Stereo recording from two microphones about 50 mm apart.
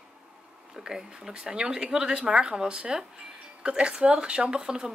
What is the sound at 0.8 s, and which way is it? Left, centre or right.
Speech, centre.